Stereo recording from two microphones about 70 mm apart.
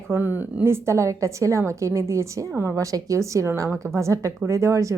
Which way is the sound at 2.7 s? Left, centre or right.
Right.